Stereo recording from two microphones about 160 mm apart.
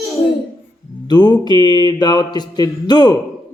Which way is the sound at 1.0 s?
25° left (ahead or behind).